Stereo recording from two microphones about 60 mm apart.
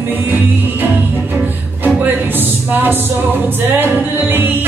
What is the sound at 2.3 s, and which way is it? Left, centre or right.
Music, right.